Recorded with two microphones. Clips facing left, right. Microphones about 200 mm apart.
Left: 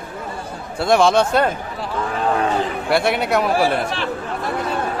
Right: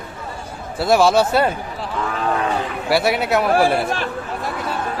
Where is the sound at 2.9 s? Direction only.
5° right (ahead or behind).